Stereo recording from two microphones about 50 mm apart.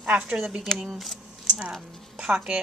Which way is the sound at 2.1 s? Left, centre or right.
Right.